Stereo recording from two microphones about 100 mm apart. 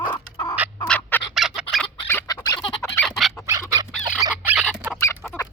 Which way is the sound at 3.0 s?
Centre (ahead or behind).